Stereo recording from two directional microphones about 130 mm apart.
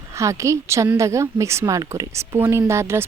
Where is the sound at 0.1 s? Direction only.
25° right (ahead or behind).